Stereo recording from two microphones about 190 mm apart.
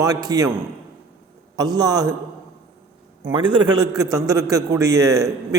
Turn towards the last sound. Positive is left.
turn(degrees=-15)  # may be behind; listen again after turning